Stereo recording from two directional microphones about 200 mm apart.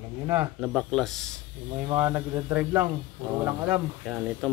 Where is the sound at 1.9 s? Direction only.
10° right (ahead or behind).